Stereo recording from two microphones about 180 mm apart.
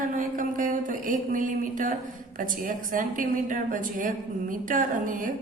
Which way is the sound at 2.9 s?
45° right (ahead or behind).